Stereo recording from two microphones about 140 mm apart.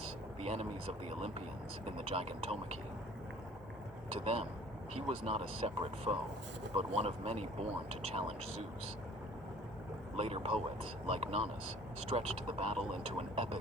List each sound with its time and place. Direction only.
0.4 s speech: 50° right (ahead or behind)
2.0 s speech: 45° right (ahead or behind)
4.2 s speech: 50° right (ahead or behind)
10.2 s speech: 45° right (ahead or behind)